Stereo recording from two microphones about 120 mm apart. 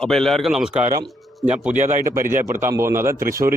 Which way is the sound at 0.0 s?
5° left (ahead or behind).